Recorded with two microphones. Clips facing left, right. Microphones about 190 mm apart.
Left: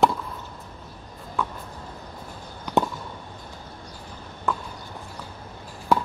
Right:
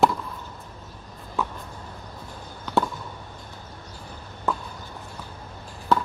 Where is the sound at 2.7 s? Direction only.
15° left (ahead or behind).